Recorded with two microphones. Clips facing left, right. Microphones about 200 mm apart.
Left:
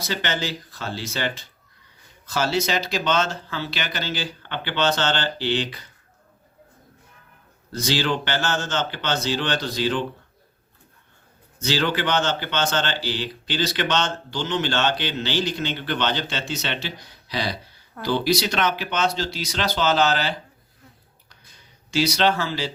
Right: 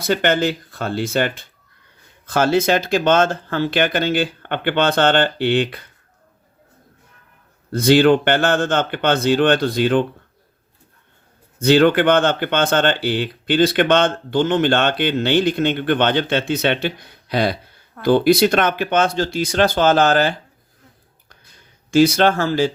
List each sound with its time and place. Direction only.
0.0 s speech: 55° right (ahead or behind)
7.7 s speech: 55° right (ahead or behind)
11.6 s speech: 55° right (ahead or behind)
21.8 s speech: 50° right (ahead or behind)